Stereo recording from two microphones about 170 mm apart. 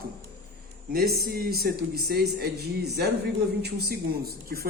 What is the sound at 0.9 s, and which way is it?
A man's voice, 65° right (ahead or behind).